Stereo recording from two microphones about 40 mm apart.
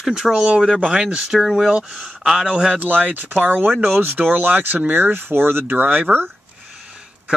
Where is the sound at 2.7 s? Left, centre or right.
Right.